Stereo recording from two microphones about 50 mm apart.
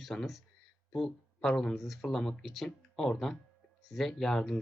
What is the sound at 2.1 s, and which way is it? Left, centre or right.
Speech, centre.